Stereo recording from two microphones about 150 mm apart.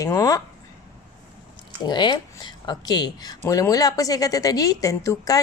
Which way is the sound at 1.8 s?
30° left (ahead or behind).